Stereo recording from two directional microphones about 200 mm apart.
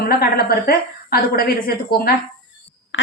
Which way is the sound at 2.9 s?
70° left (ahead or behind).